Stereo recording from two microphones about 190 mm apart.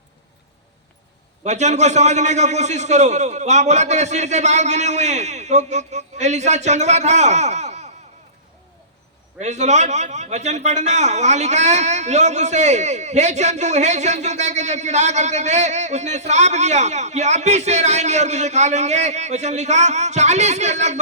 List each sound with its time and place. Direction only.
1.5 s a man's voice: 35° right (ahead or behind)
9.4 s a man's voice: 35° right (ahead or behind)